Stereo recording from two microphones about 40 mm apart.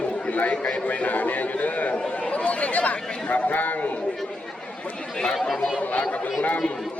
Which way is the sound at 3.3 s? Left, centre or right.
Left.